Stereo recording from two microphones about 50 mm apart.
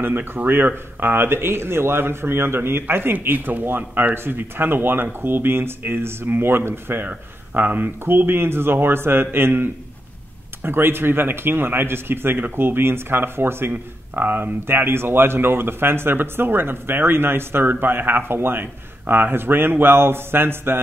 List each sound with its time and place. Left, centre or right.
0.0 s speech: right
7.1 s speech: right
8.0 s speech: right